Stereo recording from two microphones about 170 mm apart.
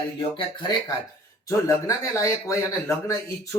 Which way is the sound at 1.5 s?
20° left (ahead or behind).